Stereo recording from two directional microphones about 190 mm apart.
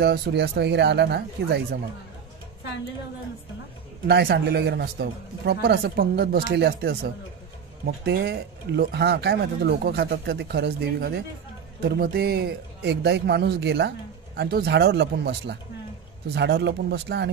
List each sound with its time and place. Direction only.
0.0 s a man's voice: 60° right (ahead or behind)
4.1 s a man's voice: 55° right (ahead or behind)